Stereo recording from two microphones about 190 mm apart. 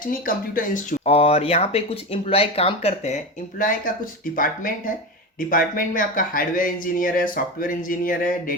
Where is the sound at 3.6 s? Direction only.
45° left (ahead or behind).